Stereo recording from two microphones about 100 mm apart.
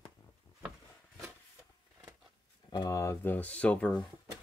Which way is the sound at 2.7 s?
45° left (ahead or behind).